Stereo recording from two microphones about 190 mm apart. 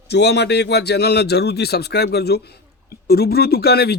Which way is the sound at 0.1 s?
60° left (ahead or behind).